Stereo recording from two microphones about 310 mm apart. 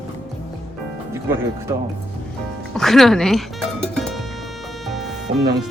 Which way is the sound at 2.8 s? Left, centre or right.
Centre.